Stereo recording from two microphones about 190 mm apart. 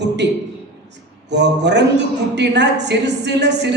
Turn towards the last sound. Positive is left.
turn(degrees=-65)  # may be behind; listen again after turning